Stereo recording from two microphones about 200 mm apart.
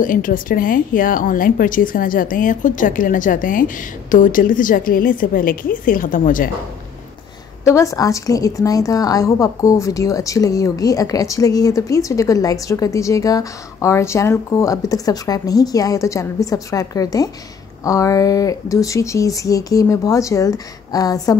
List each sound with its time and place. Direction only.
0.0 s speech: 40° left (ahead or behind)
7.6 s a woman's voice: 15° left (ahead or behind)